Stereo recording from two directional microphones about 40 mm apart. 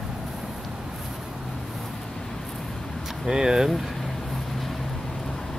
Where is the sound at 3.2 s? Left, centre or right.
Centre.